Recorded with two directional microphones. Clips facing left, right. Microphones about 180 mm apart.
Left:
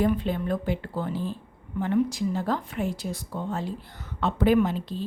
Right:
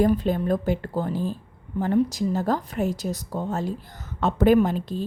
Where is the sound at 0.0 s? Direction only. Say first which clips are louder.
Right 4 dB; 40° right (ahead or behind).